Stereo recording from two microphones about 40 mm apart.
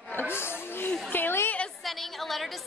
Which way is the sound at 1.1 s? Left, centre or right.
Left.